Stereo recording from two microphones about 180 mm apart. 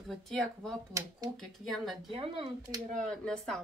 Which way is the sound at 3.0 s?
5° left (ahead or behind).